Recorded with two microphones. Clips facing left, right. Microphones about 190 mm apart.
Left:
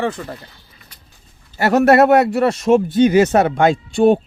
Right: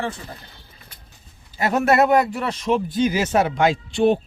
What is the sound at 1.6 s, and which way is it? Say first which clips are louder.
Speech: left 6 dB; 70° left (ahead or behind).